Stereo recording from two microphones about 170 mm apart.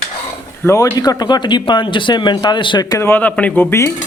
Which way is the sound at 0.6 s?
20° left (ahead or behind).